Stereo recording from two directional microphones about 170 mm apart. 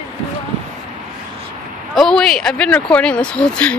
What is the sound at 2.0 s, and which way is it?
Speech, 5° left (ahead or behind).